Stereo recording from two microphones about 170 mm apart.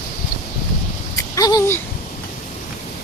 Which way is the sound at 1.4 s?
20° left (ahead or behind).